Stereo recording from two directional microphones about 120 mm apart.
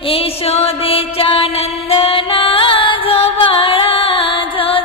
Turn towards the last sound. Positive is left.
turn(degrees=50)  # may be behind; listen again after turning